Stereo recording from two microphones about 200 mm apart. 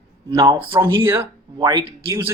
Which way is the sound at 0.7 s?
15° right (ahead or behind).